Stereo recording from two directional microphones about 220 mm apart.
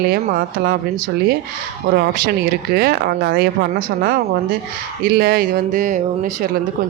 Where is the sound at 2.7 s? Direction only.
45° right (ahead or behind).